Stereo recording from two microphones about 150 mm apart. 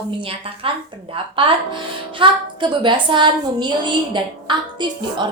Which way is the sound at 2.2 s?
30° right (ahead or behind).